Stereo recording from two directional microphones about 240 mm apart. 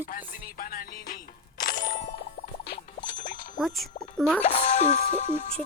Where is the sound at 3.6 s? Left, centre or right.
Centre.